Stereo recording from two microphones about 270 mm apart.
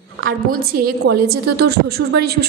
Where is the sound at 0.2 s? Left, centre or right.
Right.